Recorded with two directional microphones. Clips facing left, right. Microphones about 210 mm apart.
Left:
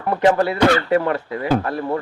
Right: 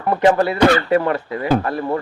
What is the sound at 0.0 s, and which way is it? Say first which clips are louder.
Speech: right 1 dB; 20° right (ahead or behind).